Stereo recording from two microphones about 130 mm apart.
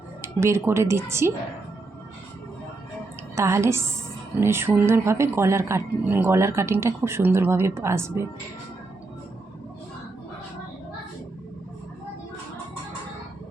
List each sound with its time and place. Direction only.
0.2 s speech: 20° right (ahead or behind)
3.3 s speech: 20° right (ahead or behind)